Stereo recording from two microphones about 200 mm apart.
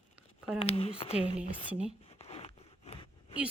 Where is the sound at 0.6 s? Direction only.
30° left (ahead or behind).